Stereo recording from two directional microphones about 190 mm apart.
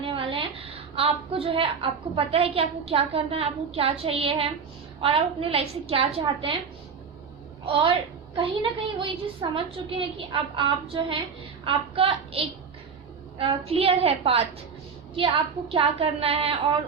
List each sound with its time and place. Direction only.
0.0 s a woman's voice: 25° right (ahead or behind)
7.6 s a woman's voice: 25° right (ahead or behind)
9.0 s a woman's voice: 30° right (ahead or behind)
15.7 s a woman's voice: 30° right (ahead or behind)